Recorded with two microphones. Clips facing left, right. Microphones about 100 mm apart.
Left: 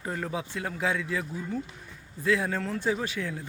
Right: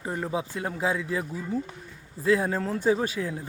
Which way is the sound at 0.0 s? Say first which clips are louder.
Right 3 dB; 20° right (ahead or behind).